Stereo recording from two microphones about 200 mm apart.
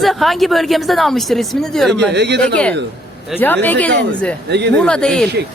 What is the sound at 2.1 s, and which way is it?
Speech, 55° right (ahead or behind).